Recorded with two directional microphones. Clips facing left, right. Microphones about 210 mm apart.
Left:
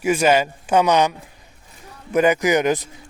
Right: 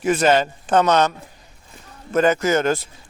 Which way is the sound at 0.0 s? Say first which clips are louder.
Even; 10° left (ahead or behind).